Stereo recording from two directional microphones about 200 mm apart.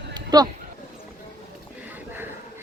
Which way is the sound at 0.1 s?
20° right (ahead or behind).